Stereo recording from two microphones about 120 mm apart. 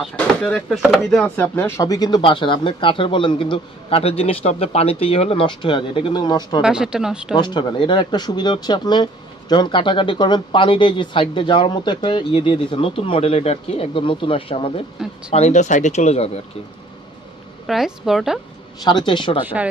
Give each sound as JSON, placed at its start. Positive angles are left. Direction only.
{"t": 0.1, "sound": "speech", "side_deg": 10}
{"t": 1.3, "sound": "speech", "side_deg": 15}
{"t": 1.8, "sound": "speech", "side_deg": 30}
{"t": 6.6, "sound": "speech", "side_deg": -5}
{"t": 7.3, "sound": "speech", "side_deg": 35}
{"t": 15.0, "sound": "speech", "side_deg": -5}
{"t": 15.3, "sound": "speech", "side_deg": 75}
{"t": 17.6, "sound": "speech", "side_deg": -5}
{"t": 18.9, "sound": "speech", "side_deg": 40}